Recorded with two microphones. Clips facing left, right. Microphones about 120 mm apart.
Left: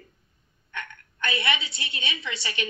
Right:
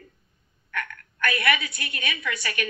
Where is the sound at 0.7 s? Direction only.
25° left (ahead or behind).